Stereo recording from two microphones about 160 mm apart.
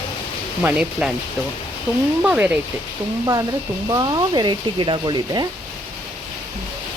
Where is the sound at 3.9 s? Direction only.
25° right (ahead or behind).